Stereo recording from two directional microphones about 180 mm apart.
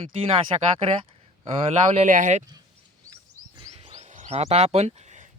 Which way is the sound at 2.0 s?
45° right (ahead or behind).